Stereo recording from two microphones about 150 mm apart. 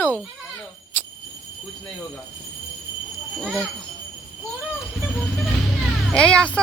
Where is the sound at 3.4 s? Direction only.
5° left (ahead or behind).